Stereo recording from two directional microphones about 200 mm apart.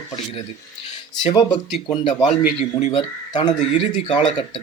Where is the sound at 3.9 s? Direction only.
35° left (ahead or behind).